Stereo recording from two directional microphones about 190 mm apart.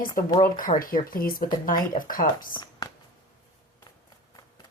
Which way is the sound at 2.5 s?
20° left (ahead or behind).